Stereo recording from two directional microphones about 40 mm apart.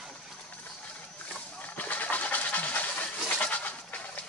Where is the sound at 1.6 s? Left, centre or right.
Left.